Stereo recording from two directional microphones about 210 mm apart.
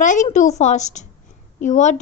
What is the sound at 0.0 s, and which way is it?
A woman's voice, 35° left (ahead or behind).